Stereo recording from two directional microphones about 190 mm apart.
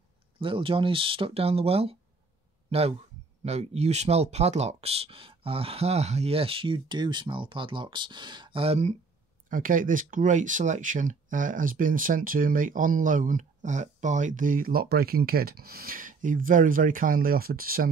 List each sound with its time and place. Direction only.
0.4 s speech: 25° right (ahead or behind)
9.5 s speech: 45° right (ahead or behind)